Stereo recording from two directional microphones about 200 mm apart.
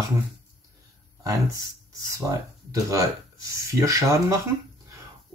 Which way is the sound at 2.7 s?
15° right (ahead or behind).